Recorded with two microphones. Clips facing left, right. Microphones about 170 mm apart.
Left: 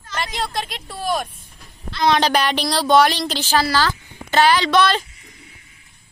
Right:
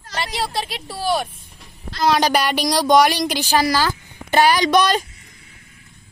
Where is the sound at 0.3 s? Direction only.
10° right (ahead or behind).